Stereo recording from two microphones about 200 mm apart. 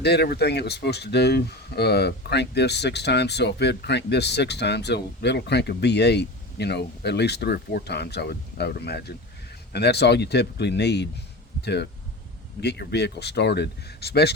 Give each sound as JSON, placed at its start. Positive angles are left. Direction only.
{"t": 0.0, "sound": "speech", "side_deg": 55}